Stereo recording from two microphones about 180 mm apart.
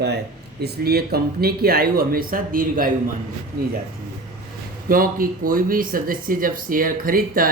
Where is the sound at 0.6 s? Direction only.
60° right (ahead or behind).